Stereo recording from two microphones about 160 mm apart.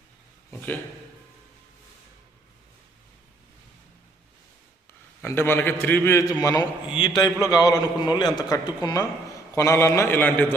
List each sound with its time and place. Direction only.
5.2 s a man's voice: 15° left (ahead or behind)